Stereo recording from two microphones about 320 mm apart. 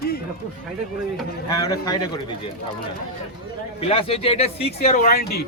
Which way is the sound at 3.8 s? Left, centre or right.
Centre.